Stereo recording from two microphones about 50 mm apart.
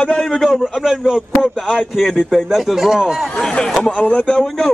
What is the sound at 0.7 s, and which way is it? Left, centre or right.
A man's voice, centre.